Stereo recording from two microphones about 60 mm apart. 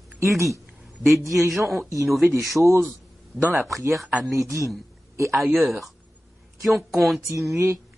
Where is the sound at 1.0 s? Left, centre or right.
Centre.